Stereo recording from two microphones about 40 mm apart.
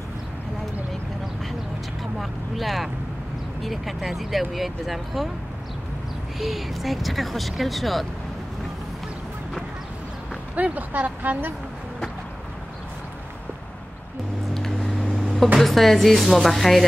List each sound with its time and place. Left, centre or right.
2.1 s speech: centre
6.4 s speech: centre
10.5 s speech: right
14.5 s a sound: centre
15.6 s speech: centre